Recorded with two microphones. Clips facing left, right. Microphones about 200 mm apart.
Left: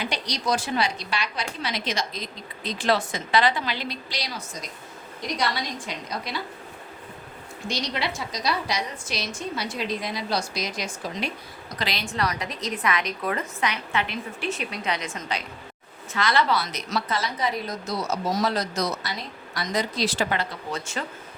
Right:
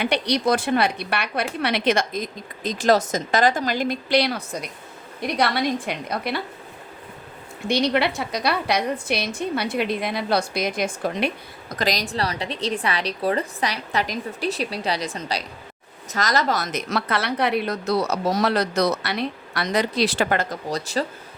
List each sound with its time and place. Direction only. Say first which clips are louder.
0.0 s a woman's voice: right 8 dB; 60° right (ahead or behind)
7.7 s a woman's voice: right 9 dB; 60° right (ahead or behind)
11.8 s a woman's voice: right 4 dB; 40° right (ahead or behind)